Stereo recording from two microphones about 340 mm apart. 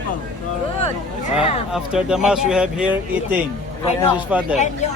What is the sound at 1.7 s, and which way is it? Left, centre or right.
Speech, centre.